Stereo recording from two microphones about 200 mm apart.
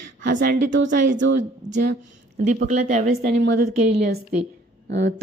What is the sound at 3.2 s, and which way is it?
Speech, 55° right (ahead or behind).